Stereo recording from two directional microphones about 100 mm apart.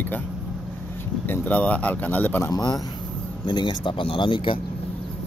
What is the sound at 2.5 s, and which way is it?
Speech, 40° left (ahead or behind).